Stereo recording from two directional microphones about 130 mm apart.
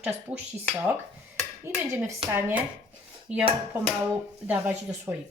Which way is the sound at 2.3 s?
15° right (ahead or behind).